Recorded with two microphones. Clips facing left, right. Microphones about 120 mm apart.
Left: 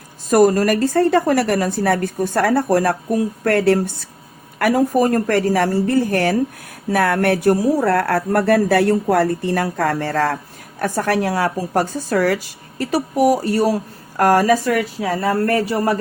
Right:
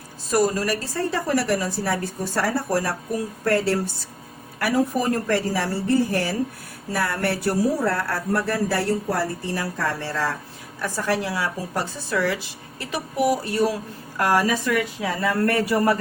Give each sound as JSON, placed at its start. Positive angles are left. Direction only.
{"t": 0.3, "sound": "speech", "side_deg": 50}
{"t": 4.6, "sound": "a woman's voice", "side_deg": 50}